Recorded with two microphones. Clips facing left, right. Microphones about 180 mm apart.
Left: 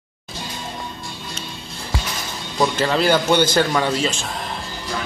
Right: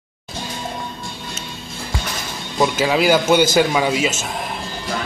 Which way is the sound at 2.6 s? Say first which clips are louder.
Right 2 dB; 10° right (ahead or behind).